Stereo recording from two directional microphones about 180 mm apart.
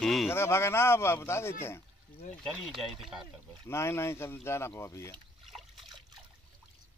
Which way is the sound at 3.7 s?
15° left (ahead or behind).